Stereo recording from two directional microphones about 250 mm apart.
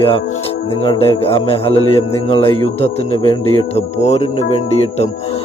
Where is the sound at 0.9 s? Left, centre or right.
Left.